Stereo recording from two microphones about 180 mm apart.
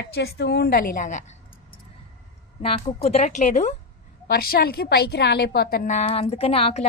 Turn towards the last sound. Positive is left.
turn(degrees=35)  # may be behind; listen again after turning